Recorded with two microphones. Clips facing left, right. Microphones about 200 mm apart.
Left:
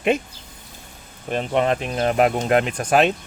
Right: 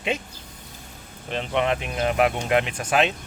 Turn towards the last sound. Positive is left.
turn(degrees=45)  # may be behind; listen again after turning